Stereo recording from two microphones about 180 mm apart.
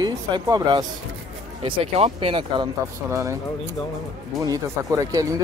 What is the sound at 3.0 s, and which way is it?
Speech, 15° right (ahead or behind).